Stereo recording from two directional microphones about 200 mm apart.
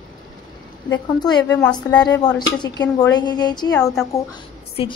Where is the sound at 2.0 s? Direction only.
20° left (ahead or behind).